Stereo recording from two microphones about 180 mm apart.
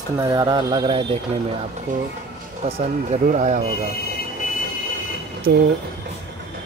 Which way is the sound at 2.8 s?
40° right (ahead or behind).